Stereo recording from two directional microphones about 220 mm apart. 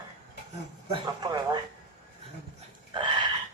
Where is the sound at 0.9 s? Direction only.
20° right (ahead or behind).